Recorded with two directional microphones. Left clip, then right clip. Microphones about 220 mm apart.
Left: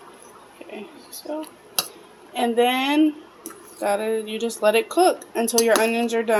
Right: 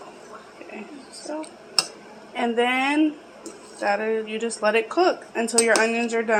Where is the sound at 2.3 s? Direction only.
15° left (ahead or behind).